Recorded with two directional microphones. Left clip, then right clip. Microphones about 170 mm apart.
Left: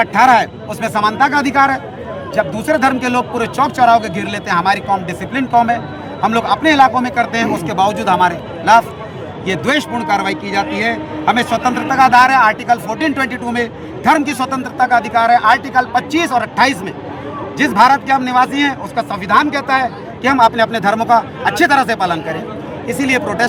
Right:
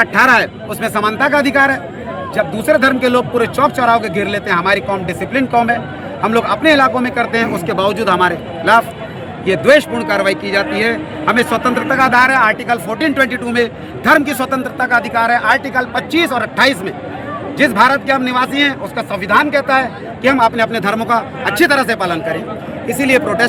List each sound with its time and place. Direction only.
0.0 s a man's voice: 15° left (ahead or behind)